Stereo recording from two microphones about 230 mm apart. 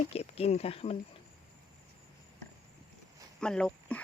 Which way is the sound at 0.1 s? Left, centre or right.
Left.